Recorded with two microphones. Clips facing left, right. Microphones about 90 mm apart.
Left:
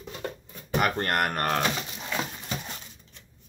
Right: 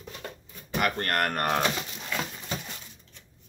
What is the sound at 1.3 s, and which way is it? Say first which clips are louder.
Speech: even; 5° right (ahead or behind).